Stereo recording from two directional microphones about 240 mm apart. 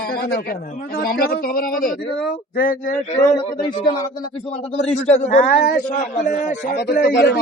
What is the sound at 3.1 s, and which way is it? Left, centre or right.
A man's voice, centre.